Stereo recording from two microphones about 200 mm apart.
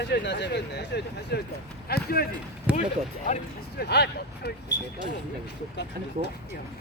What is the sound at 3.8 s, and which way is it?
Speech, 55° left (ahead or behind).